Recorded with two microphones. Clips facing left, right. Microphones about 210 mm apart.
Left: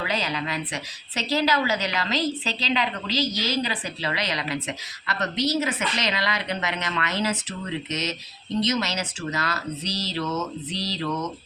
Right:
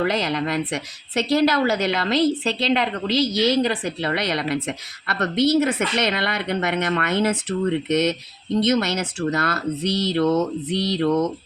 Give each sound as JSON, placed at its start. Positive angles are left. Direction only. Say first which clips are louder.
{"t": 0.0, "sound": "a woman's voice", "louder": "right 6 dB", "side_deg": -60}